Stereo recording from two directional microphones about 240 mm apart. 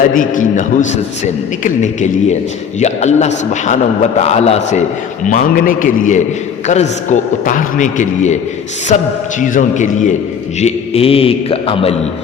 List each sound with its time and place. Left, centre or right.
0.1 s a man's voice: left